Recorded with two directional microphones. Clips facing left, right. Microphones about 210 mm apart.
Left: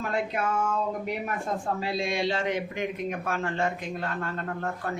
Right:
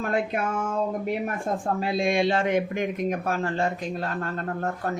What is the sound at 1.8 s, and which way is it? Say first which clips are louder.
Speech: right 7 dB; 50° right (ahead or behind).